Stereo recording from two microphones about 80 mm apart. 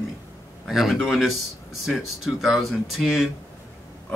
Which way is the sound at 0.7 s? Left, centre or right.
Centre.